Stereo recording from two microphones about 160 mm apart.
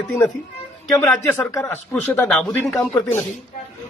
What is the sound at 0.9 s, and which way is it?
Speech, 20° left (ahead or behind).